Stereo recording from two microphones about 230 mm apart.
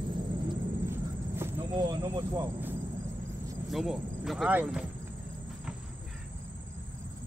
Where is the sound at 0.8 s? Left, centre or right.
Centre.